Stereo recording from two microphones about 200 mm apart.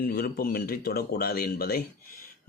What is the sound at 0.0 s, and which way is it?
Speech, 50° left (ahead or behind).